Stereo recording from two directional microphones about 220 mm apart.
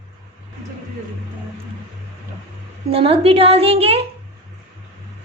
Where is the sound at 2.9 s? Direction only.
25° right (ahead or behind).